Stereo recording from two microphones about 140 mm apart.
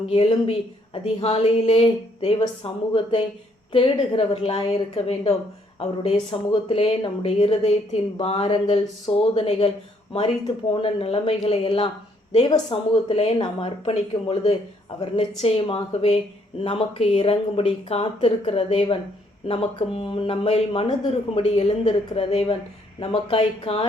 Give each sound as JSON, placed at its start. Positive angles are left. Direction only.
{"t": 0.1, "sound": "speech", "side_deg": 40}
{"t": 2.9, "sound": "a woman's voice", "side_deg": 35}